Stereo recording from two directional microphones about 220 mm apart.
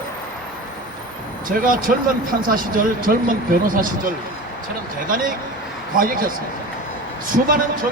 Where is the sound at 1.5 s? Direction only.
40° right (ahead or behind).